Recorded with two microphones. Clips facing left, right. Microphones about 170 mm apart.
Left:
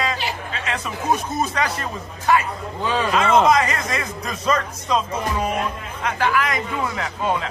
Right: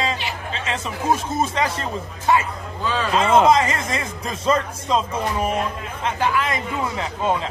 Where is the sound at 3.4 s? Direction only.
25° right (ahead or behind).